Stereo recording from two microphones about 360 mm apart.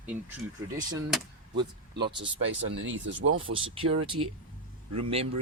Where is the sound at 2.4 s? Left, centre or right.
Right.